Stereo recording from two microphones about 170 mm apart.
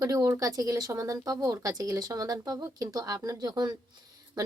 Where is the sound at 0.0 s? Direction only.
20° right (ahead or behind).